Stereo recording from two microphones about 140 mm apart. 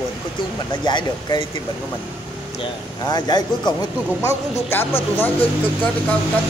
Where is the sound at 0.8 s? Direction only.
30° left (ahead or behind).